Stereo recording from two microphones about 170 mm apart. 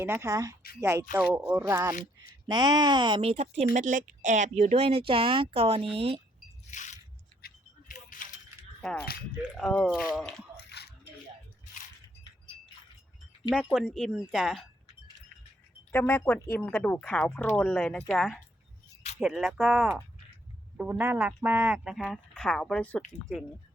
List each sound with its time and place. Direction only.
0.0 s speech: 15° right (ahead or behind); by 6.1 s 35° right (ahead or behind)
6.7 s biting: 45° left (ahead or behind)
7.4 s a sound: 50° left (ahead or behind)
8.8 s speech: 5° left (ahead or behind)
10.7 s biting: 75° left (ahead or behind)
13.5 s speech: centre (ahead or behind)
15.9 s speech: 10° left (ahead or behind); by 20.0 s 10° right (ahead or behind)
21.0 s speech: 10° right (ahead or behind); by 23.0 s 5° left (ahead or behind)